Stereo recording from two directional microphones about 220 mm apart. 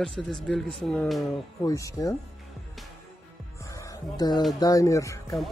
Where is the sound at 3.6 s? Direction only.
15° left (ahead or behind).